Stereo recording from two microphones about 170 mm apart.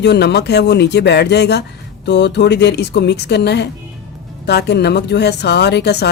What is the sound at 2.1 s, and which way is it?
Speech, 90° left.